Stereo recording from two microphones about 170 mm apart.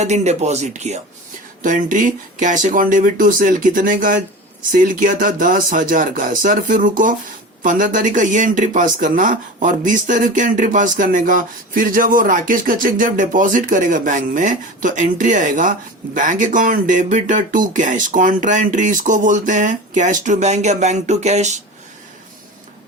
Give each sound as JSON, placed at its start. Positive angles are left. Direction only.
{"t": 0.0, "sound": "speech", "side_deg": -40}